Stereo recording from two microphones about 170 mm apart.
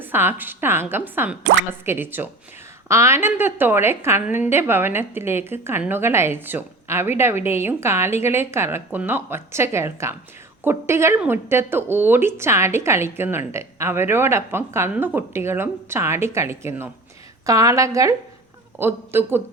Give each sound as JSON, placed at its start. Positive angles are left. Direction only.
{"t": 0.0, "sound": "a woman's voice", "side_deg": -10}